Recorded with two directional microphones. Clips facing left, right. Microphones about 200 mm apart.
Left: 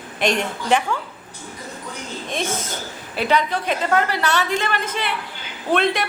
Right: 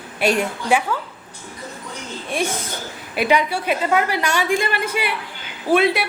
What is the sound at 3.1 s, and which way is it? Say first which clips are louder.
A woman's voice: right 2 dB; 10° right (ahead or behind).